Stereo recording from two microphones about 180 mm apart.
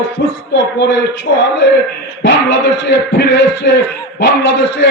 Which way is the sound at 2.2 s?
80° left.